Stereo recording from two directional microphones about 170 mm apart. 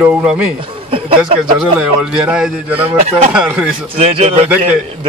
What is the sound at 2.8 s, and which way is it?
Speech, 30° right (ahead or behind).